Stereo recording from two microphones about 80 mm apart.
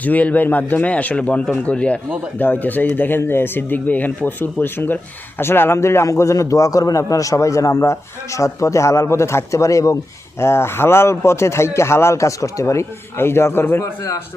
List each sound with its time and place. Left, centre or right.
0.0 s a man's voice: centre; by 10.0 s left
10.4 s a man's voice: left